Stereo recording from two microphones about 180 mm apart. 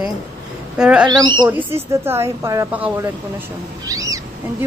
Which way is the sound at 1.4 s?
10° right (ahead or behind).